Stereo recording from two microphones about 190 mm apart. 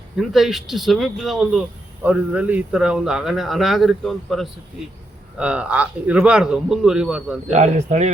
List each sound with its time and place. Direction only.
0.2 s speech: centre (ahead or behind)
7.5 s speech: 35° right (ahead or behind)